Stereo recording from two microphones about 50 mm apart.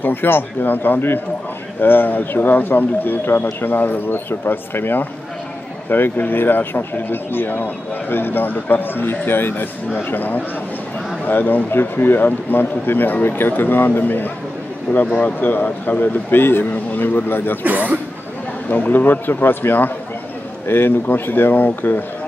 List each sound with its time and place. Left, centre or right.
0.0 s speech: left
17.6 s speech: right
18.7 s speech: left